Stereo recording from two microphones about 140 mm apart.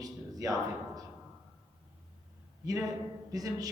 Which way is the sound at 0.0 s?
25° right (ahead or behind).